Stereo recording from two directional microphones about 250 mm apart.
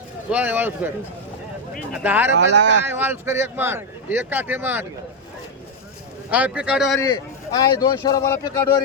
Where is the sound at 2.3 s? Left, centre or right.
Right.